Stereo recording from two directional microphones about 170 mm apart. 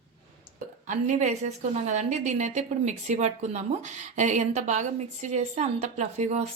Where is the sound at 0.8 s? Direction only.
45° right (ahead or behind).